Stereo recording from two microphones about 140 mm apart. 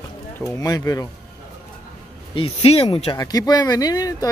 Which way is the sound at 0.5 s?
25° left (ahead or behind).